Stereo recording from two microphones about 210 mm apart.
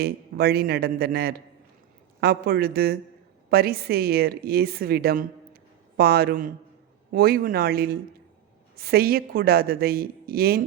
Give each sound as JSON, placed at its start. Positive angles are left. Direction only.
{"t": 0.0, "sound": "a woman's voice", "side_deg": -45}